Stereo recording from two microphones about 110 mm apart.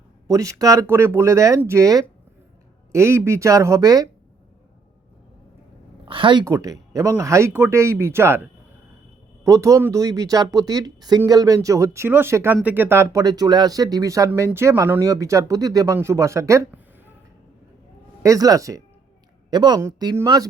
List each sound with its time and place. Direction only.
0.3 s speech: 30° right (ahead or behind)
6.1 s a woman's voice: 50° right (ahead or behind)
6.4 s speech: 30° right (ahead or behind)
9.4 s speech: 30° right (ahead or behind)
13.2 s speech: 35° right (ahead or behind)
18.2 s speech: 30° right (ahead or behind)